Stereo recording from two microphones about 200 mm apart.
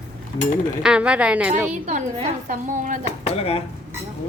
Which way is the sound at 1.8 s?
35° right (ahead or behind).